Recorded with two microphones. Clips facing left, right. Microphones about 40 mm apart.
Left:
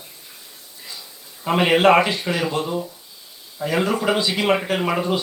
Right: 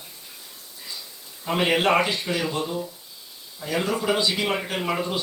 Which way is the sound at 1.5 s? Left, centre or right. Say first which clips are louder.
Left 6 dB; centre.